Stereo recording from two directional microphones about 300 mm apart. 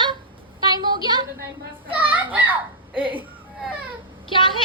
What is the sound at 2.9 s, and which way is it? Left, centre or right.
Speech, centre.